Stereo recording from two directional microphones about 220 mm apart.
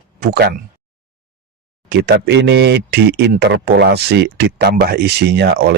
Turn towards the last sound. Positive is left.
turn(degrees=-50)  # may be behind; listen again after turning